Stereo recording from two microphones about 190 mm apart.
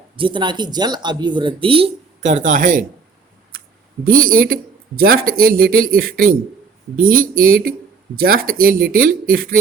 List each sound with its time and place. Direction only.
0.2 s speech: 25° right (ahead or behind); by 2.8 s 45° right (ahead or behind)
3.5 s a sound: 50° right (ahead or behind)
4.0 s speech: 50° right (ahead or behind)